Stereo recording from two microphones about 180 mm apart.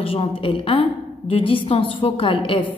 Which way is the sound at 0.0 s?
30° left (ahead or behind).